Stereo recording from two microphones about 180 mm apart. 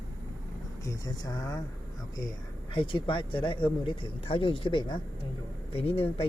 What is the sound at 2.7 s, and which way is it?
Speech, 30° left (ahead or behind).